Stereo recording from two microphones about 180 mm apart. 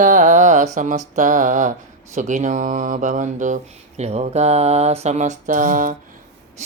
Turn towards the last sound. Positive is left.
turn(degrees=-45)  # may be behind; listen again after turning